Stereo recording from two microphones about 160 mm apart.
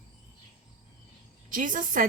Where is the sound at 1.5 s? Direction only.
55° right (ahead or behind).